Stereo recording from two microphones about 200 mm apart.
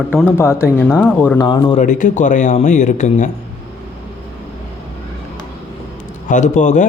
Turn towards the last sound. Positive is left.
turn(degrees=35)  # may be behind; listen again after turning